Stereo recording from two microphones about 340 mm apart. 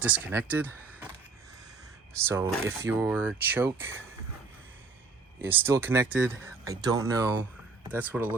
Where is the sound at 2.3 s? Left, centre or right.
Centre.